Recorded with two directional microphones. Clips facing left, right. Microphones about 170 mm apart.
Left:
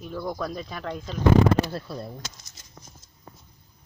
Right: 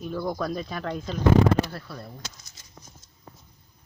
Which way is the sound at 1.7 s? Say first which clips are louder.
Left 5 dB; 20° left (ahead or behind).